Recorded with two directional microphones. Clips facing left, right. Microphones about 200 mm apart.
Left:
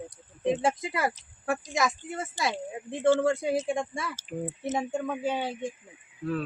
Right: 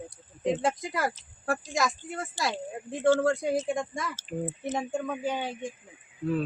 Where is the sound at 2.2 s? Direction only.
Centre (ahead or behind).